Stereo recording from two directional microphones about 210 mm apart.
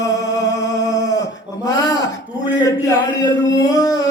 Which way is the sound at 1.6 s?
15° left (ahead or behind).